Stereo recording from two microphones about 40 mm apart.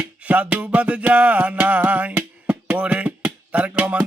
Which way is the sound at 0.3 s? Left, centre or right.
Right.